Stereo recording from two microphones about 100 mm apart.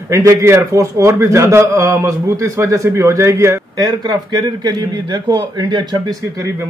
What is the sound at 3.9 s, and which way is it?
A man's voice, 45° right (ahead or behind).